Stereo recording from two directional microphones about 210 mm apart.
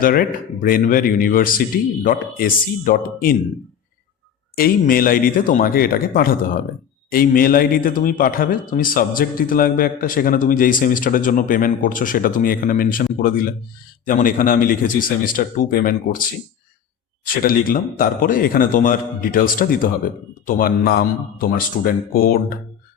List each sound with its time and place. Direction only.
0.0 s a man's voice: 45° left (ahead or behind)
4.5 s a man's voice: 45° left (ahead or behind)
17.2 s a man's voice: 40° left (ahead or behind)